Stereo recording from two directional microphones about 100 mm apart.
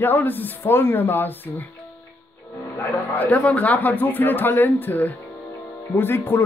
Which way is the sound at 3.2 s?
15° left (ahead or behind).